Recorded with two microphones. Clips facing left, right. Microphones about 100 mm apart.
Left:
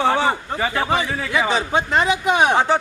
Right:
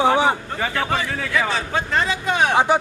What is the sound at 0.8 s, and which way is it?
A man's voice, 20° left (ahead or behind).